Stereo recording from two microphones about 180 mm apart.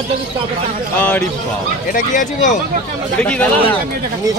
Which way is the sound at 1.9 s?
45° left (ahead or behind).